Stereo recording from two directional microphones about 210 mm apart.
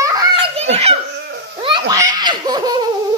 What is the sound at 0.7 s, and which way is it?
Speech, 30° right (ahead or behind).